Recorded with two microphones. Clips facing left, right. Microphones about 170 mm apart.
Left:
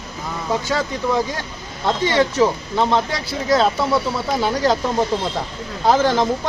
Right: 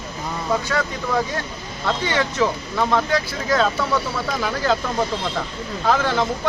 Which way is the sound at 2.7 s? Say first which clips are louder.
Left 1 dB; 25° left (ahead or behind).